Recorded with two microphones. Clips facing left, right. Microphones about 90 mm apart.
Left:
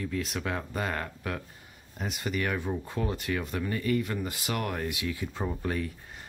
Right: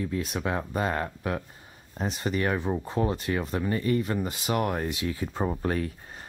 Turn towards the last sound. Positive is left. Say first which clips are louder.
# right 3 dB
turn(degrees=-45)  # may be behind; listen again after turning